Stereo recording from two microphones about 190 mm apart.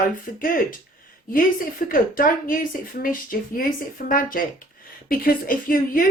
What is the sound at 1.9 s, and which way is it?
A woman's voice, 45° left (ahead or behind).